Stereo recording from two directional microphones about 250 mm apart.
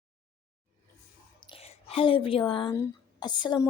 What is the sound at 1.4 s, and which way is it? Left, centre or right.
Speech, left.